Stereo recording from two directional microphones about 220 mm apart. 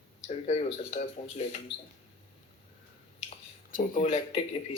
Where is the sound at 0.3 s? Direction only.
30° left (ahead or behind).